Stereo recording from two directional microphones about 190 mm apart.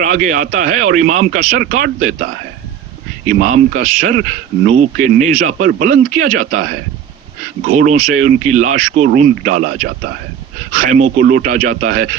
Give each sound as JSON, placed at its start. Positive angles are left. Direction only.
{"t": 0.0, "sound": "speech", "side_deg": -45}